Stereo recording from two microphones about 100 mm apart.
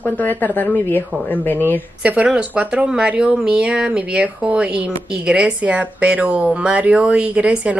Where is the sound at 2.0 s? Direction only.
10° right (ahead or behind).